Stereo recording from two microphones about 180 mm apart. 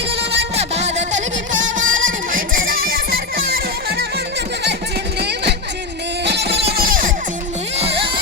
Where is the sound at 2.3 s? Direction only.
50° right (ahead or behind).